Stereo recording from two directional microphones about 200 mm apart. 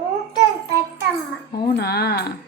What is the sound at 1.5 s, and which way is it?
Speech, 50° left (ahead or behind).